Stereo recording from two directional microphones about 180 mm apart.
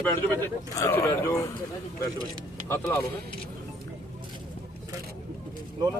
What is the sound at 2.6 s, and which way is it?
Speech, 15° left (ahead or behind).